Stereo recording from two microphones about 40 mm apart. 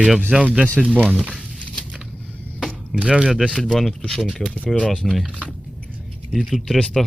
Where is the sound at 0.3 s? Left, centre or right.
Centre.